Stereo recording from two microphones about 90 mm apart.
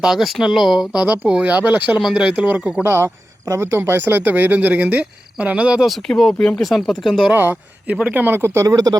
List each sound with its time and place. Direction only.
0.0 s speech: 5° right (ahead or behind)
1.0 s speech: 15° right (ahead or behind)
2.0 s speech: 5° right (ahead or behind)
6.1 s speech: 5° left (ahead or behind)
7.3 s speech: 20° right (ahead or behind); by 9.0 s 45° right (ahead or behind)